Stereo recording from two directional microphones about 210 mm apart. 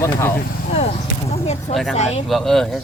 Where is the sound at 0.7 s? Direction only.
30° left (ahead or behind).